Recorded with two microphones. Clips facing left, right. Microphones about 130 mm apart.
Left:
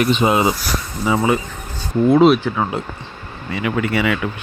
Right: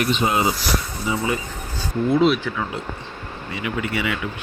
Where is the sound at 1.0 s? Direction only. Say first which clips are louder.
Left 8 dB; 90° left.